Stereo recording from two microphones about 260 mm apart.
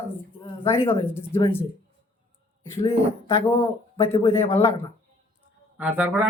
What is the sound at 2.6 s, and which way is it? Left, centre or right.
Speech, centre.